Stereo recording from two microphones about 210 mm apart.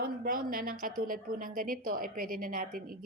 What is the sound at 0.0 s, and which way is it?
A woman's voice, 45° right (ahead or behind).